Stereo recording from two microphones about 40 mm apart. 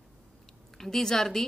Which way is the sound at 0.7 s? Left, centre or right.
Centre.